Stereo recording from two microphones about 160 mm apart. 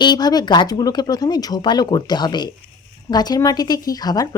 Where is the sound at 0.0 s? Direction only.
25° left (ahead or behind).